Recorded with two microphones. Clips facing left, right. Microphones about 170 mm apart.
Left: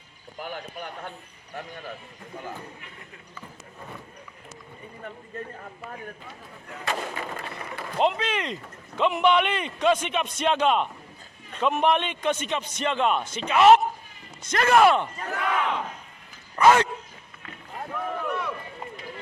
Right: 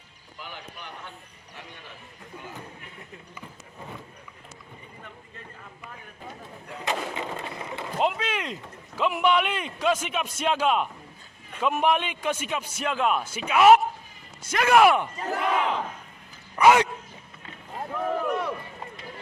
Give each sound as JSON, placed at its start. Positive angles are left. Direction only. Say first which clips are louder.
{"t": 0.3, "sound": "a man's voice", "louder": "left 7 dB", "side_deg": 50}
{"t": 5.5, "sound": "a man's voice", "louder": "left 5 dB", "side_deg": 45}
{"t": 6.2, "sound": "speech", "louder": "right 2 dB", "side_deg": -20}
{"t": 7.9, "sound": "a man's voice", "louder": "left 2 dB", "side_deg": -5}
{"t": 15.3, "sound": "battle cry", "louder": "right 3 dB", "side_deg": -30}
{"t": 16.6, "sound": "a man's voice", "louder": "even", "side_deg": -15}
{"t": 18.3, "sound": "run", "louder": "right 2 dB", "side_deg": -35}